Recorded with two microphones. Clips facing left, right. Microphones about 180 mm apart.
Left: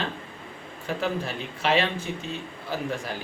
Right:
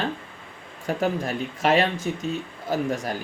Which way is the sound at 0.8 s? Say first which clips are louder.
Right 4 dB; 45° right (ahead or behind).